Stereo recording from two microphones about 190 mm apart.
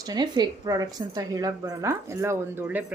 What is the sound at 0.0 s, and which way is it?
A woman's voice, 20° right (ahead or behind).